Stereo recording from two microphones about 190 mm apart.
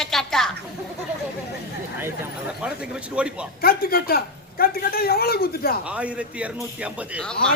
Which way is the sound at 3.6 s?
50° left (ahead or behind).